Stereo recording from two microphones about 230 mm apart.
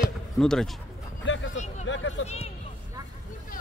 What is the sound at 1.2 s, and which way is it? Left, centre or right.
Vehicle, left.